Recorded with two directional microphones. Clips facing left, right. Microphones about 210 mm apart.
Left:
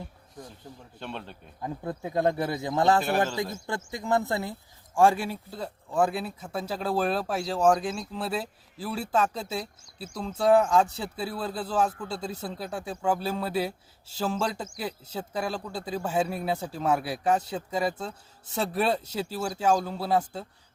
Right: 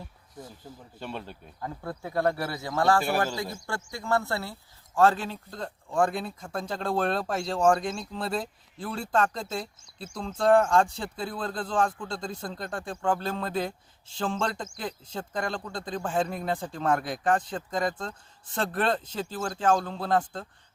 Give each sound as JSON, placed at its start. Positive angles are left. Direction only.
{"t": 0.9, "sound": "speech", "side_deg": -10}
{"t": 1.6, "sound": "speech", "side_deg": 20}